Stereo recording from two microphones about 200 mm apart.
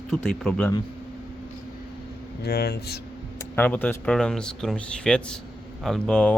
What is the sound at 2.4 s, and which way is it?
Speech, 50° left (ahead or behind).